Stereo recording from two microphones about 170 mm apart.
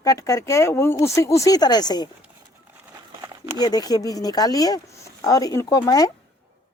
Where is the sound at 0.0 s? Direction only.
20° left (ahead or behind).